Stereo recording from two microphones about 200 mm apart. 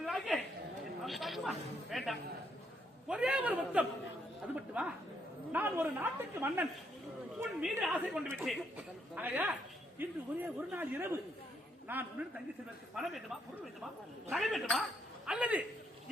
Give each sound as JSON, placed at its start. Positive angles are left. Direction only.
{"t": 0.0, "sound": "a sound", "side_deg": 0}
{"t": 1.0, "sound": "a woman's voice", "side_deg": 0}
{"t": 14.3, "sound": "a woman's voice", "side_deg": 0}